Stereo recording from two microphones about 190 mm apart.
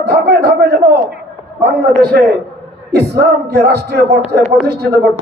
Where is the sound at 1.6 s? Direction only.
60° right (ahead or behind).